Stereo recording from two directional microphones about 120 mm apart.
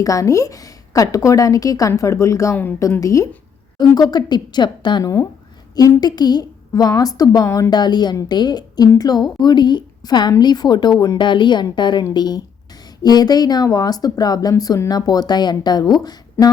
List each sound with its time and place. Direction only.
0.0 s a woman's voice: 30° left (ahead or behind)